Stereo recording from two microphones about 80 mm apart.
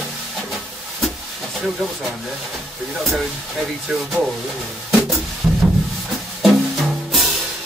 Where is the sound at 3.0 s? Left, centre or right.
Centre.